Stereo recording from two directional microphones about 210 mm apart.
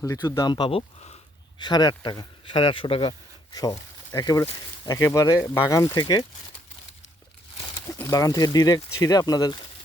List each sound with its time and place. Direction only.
0.0 s speech: 15° left (ahead or behind)
7.9 s speech: 15° left (ahead or behind)